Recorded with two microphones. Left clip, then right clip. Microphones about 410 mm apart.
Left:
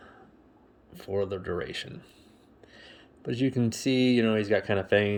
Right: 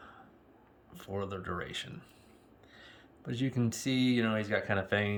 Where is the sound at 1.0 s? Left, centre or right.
Centre.